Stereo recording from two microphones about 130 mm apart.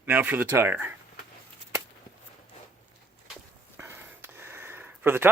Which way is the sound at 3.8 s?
20° right (ahead or behind).